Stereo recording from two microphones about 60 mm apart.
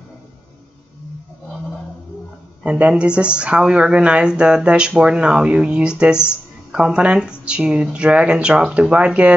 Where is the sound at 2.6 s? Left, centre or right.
Centre.